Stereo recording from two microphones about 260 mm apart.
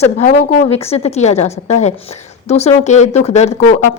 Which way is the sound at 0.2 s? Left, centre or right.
Left.